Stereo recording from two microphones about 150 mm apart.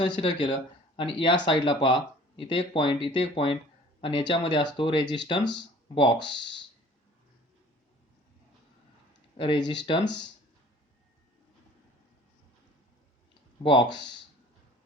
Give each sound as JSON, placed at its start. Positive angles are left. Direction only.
{"t": 0.0, "sound": "speech", "side_deg": 35}
{"t": 9.4, "sound": "speech", "side_deg": 30}
{"t": 13.6, "sound": "speech", "side_deg": 35}